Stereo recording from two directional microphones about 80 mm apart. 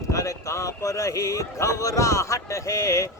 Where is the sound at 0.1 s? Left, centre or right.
Left.